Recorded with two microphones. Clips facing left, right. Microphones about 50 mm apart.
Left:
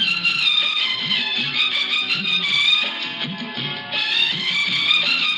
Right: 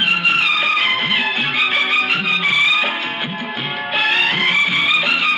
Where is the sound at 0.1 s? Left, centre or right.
Right.